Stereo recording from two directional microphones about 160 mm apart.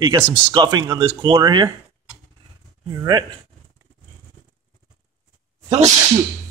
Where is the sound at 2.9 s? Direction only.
20° right (ahead or behind).